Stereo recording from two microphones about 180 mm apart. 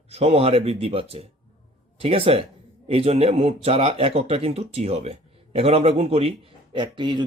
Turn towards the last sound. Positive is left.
turn(degrees=-25)  # may be behind; listen again after turning